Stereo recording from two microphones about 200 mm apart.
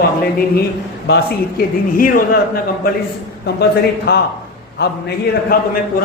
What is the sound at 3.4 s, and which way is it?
A man's voice, 55° left (ahead or behind).